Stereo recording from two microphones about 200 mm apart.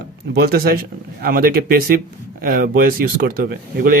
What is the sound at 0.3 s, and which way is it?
Speech, 50° right (ahead or behind).